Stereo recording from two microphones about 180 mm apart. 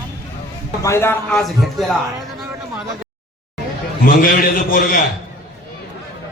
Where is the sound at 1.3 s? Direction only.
Centre (ahead or behind).